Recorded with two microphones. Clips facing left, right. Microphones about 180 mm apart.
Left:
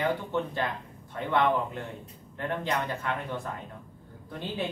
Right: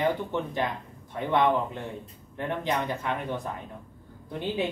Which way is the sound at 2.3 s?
15° right (ahead or behind).